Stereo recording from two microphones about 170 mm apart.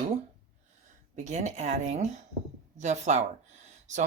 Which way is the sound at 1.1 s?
45° right (ahead or behind).